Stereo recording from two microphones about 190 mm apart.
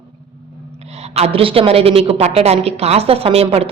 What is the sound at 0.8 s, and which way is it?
A woman's voice, 35° right (ahead or behind).